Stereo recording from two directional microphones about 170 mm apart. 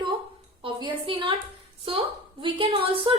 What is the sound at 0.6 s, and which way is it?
Speech, 30° right (ahead or behind).